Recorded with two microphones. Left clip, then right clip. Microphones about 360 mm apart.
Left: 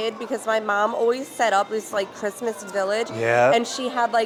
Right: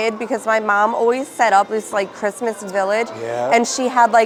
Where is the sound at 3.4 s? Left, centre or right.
Right.